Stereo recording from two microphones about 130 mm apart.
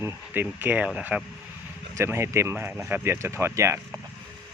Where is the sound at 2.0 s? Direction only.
20° right (ahead or behind).